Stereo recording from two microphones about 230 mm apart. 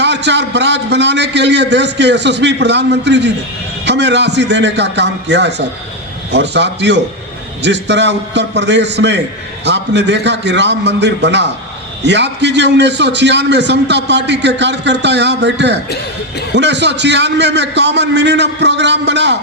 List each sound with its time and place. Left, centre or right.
0.0 s a man's voice: right